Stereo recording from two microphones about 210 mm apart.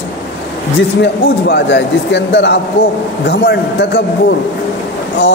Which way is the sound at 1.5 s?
55° left (ahead or behind).